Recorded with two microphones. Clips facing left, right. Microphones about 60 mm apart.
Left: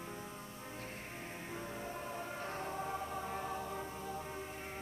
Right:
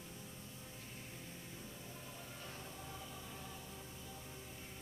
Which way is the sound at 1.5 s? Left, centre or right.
Left.